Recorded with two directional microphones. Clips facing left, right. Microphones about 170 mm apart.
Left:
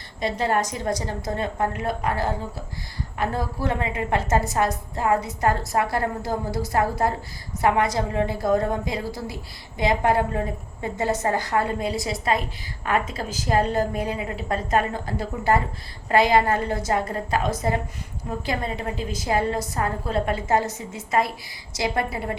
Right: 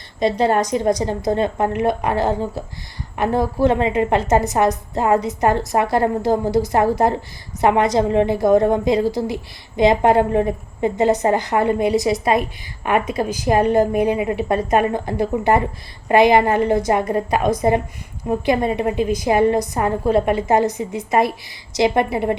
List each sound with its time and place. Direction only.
0.2 s a woman's voice: 20° right (ahead or behind)